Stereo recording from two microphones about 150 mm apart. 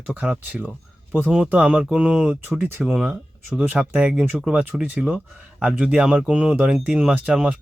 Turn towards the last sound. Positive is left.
turn(degrees=-5)  # may be behind; listen again after turning